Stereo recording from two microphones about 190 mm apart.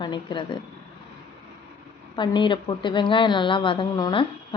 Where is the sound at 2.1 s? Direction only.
25° left (ahead or behind).